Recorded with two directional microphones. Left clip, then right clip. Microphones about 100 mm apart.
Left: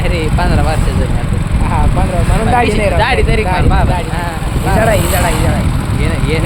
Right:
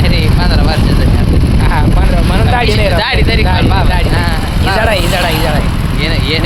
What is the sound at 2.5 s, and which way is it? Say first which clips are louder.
Speech: left 1 dB; 15° right (ahead or behind).